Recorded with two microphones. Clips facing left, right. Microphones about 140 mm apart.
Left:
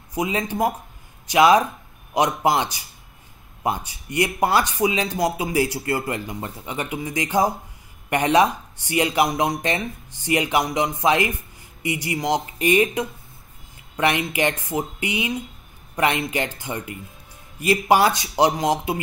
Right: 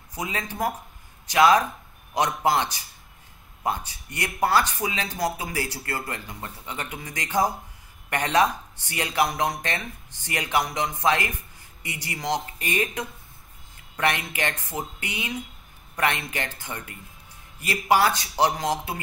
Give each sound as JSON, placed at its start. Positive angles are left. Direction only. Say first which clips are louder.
{"t": 0.1, "sound": "speech", "louder": "left 7 dB", "side_deg": 15}